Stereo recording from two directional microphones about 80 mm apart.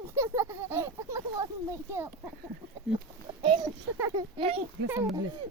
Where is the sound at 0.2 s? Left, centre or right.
Right.